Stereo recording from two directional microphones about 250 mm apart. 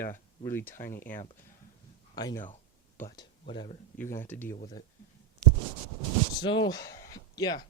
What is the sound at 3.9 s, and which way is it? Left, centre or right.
Speech, centre.